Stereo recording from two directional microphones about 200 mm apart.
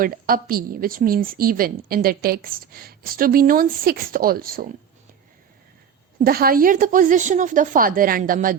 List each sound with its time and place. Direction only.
0.0 s a woman's voice: 45° right (ahead or behind)
6.2 s a woman's voice: 45° right (ahead or behind)